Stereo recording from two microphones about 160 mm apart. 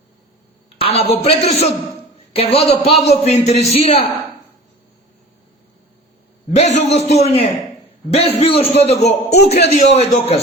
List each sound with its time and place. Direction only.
0.8 s a man's voice: 40° left (ahead or behind)
6.5 s a man's voice: 45° left (ahead or behind)